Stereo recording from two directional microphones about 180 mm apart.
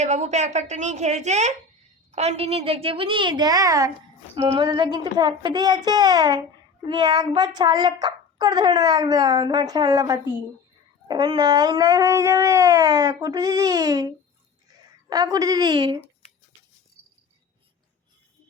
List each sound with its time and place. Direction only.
0.0 s a woman's voice: 40° right (ahead or behind)